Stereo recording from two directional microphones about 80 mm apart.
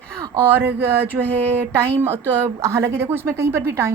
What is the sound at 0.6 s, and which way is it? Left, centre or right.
A woman's voice, right.